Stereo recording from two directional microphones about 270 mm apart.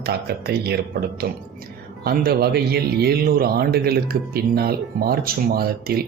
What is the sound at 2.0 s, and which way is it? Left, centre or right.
Speech, right.